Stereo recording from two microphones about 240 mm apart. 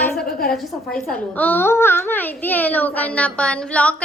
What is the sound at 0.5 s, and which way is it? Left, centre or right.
A woman's voice, centre.